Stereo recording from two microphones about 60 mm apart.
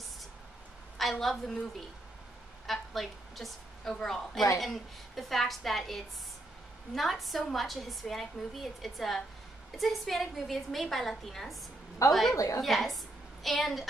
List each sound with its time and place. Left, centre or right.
1.2 s a woman's voice: centre
2.6 s a woman's voice: centre
12.4 s a woman's voice: left
12.6 s a woman's voice: centre